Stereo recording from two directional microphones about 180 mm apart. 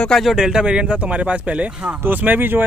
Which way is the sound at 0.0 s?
Centre (ahead or behind).